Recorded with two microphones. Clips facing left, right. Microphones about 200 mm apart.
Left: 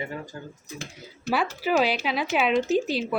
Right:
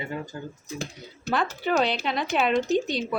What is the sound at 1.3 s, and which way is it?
Speech, 5° left (ahead or behind).